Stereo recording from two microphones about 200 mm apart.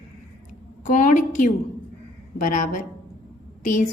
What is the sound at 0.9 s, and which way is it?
A woman's voice, 40° left (ahead or behind).